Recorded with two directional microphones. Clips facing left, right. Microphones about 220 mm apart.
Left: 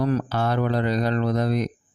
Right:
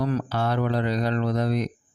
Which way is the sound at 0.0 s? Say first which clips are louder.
Left 2 dB; 45° left (ahead or behind).